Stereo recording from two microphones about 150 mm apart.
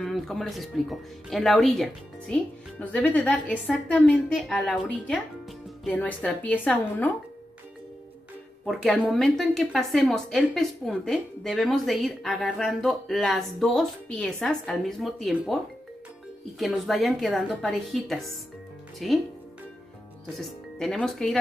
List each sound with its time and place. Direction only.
0.0 s speech: centre (ahead or behind)
8.6 s speech: centre (ahead or behind)
20.3 s speech: centre (ahead or behind)